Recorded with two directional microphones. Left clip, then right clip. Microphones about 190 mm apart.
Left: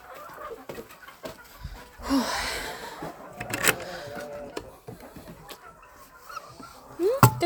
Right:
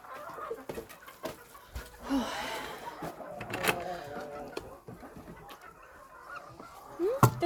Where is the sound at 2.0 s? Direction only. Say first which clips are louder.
Left 7 dB; 30° left (ahead or behind).